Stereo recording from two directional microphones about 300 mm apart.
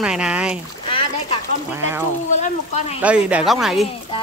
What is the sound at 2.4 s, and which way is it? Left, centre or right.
Speech, left.